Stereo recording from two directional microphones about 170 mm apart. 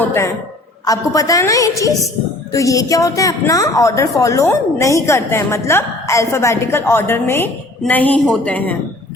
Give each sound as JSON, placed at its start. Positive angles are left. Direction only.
{"t": 0.0, "sound": "a woman's voice", "side_deg": 15}